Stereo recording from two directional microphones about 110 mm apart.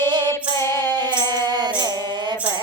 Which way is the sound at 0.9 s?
40° right (ahead or behind).